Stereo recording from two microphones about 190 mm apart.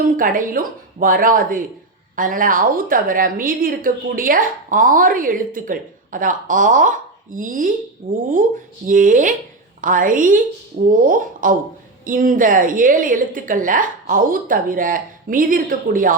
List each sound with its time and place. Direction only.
0.2 s a woman's voice: 45° right (ahead or behind)
8.9 s a woman's voice: 45° right (ahead or behind)